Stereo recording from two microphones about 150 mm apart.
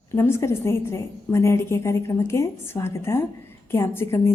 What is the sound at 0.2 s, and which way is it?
A woman's voice, 15° left (ahead or behind).